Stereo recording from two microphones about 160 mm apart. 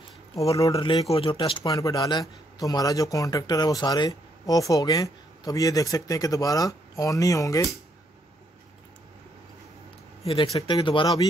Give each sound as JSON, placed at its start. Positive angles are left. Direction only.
{"t": 0.4, "sound": "speech", "side_deg": 20}
{"t": 0.7, "sound": "speech", "side_deg": 30}
{"t": 10.2, "sound": "speech", "side_deg": 35}